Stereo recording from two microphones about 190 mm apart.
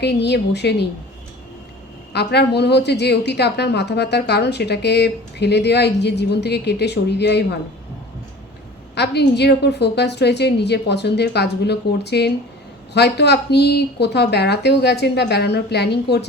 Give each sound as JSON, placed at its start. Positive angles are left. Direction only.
{"t": 0.0, "sound": "a woman's voice", "side_deg": 60}
{"t": 2.1, "sound": "a woman's voice", "side_deg": 60}
{"t": 9.0, "sound": "a woman's voice", "side_deg": 60}